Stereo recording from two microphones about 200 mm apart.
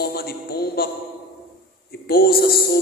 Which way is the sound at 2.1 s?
50° left (ahead or behind).